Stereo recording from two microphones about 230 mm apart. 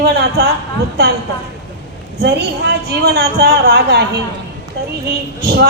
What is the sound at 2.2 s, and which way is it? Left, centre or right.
A woman's voice, right.